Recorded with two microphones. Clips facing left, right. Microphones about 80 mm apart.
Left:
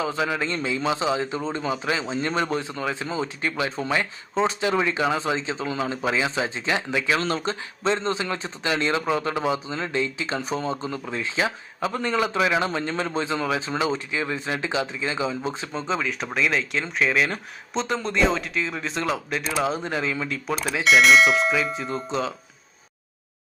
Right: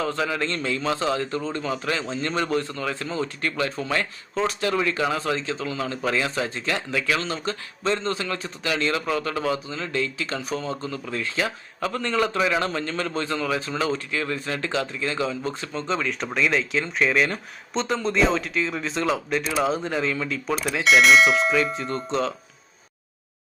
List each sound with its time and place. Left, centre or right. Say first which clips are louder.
0.0 s speech: even; centre; by 8.8 s left
8.8 s speech: left 1 dB; centre